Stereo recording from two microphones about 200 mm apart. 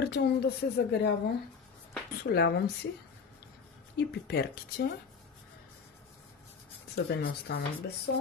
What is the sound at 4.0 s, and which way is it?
Speech, 55° left (ahead or behind).